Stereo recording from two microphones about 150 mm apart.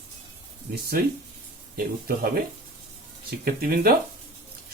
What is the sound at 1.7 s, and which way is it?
Speech, 90° right.